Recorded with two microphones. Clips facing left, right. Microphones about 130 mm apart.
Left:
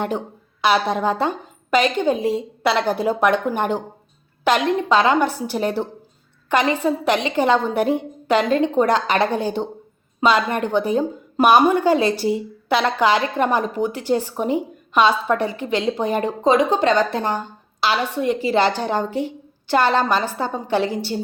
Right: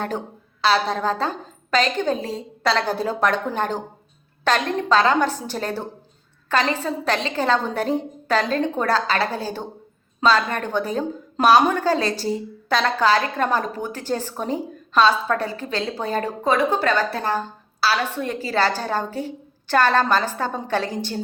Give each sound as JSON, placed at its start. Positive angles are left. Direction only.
{"t": 0.6, "sound": "a woman's voice", "side_deg": 15}